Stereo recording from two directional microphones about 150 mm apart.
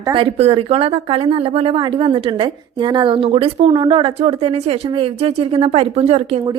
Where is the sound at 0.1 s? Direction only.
40° right (ahead or behind).